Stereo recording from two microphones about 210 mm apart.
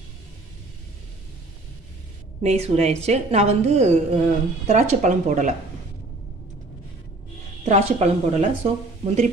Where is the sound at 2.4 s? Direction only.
30° right (ahead or behind).